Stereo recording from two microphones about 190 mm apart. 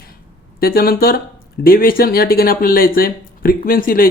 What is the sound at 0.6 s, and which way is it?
Speech, 50° left (ahead or behind).